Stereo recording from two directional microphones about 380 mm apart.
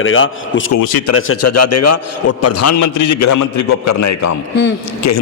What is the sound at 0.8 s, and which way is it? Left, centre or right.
Speech, left.